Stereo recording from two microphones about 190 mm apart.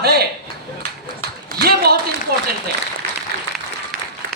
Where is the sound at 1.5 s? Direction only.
55° right (ahead or behind).